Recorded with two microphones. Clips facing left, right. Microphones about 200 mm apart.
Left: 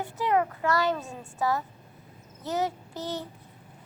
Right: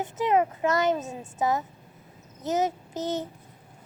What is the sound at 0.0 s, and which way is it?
A child's voice, 20° right (ahead or behind).